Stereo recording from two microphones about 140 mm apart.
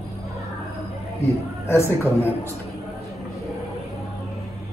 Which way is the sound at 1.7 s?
20° left (ahead or behind).